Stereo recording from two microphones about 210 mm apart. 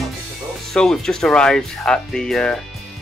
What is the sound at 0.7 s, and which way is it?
Speech, centre (ahead or behind).